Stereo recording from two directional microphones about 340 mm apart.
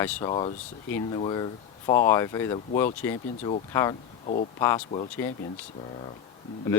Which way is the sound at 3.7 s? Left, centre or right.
Centre.